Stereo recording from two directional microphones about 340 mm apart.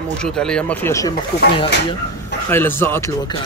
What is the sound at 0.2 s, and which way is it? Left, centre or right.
Speech, centre.